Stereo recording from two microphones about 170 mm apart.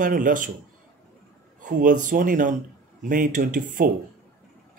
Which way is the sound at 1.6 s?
50° right (ahead or behind).